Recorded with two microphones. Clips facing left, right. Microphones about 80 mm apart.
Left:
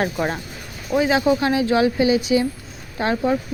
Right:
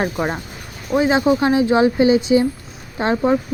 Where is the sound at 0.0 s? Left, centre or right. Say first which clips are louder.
Right 1 dB; centre.